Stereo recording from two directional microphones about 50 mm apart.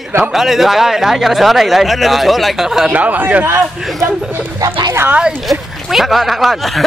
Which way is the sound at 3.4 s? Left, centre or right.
Right.